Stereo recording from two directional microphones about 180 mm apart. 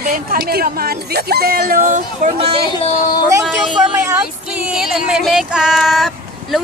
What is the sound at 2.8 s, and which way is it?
Speech, 45° left (ahead or behind).